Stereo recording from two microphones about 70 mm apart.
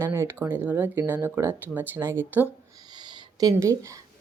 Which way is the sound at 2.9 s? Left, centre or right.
Right.